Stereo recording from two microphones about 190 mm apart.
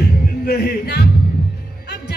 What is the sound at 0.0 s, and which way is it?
Music, 55° left (ahead or behind).